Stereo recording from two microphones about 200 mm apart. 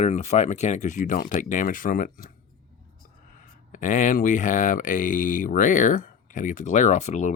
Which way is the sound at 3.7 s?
40° left (ahead or behind).